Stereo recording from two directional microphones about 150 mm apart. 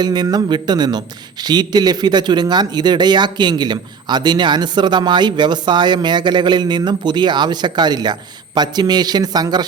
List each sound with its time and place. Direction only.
0.0 s a man's voice: 30° right (ahead or behind)